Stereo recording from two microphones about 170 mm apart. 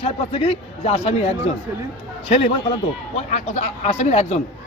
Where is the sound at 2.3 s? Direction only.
35° left (ahead or behind).